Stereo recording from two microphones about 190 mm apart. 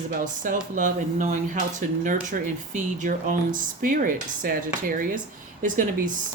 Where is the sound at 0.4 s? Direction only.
45° right (ahead or behind).